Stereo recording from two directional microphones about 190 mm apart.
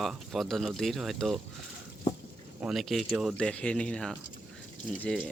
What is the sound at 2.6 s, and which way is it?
Speech, centre (ahead or behind).